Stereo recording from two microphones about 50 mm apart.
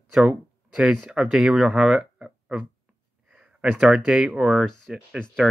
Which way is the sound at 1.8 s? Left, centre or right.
Right.